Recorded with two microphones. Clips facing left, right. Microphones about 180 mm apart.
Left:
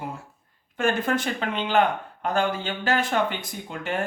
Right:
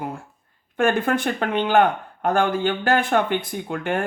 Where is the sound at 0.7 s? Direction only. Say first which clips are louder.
Right 4 dB; 55° right (ahead or behind).